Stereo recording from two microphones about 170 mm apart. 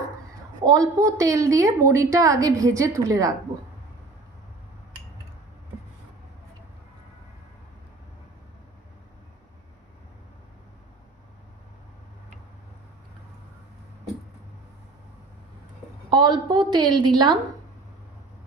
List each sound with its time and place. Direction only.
0.7 s a woman's voice: 20° right (ahead or behind)
16.1 s a woman's voice: 25° right (ahead or behind)